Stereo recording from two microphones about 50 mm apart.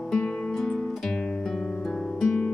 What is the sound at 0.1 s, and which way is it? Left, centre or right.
Music, centre.